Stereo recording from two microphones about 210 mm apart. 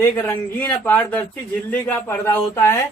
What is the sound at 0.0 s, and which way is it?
Speech, 10° left (ahead or behind).